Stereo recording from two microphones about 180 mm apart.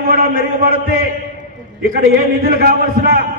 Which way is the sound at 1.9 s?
55° right (ahead or behind).